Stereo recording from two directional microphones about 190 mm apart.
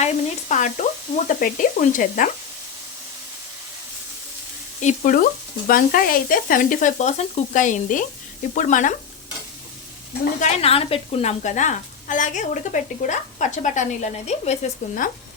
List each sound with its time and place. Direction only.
0.0 s sizzle: 40° left (ahead or behind)
4.8 s sizzle: 40° left (ahead or behind)
8.5 s a woman's voice: 40° left (ahead or behind)
10.4 s a woman's voice: 30° left (ahead or behind)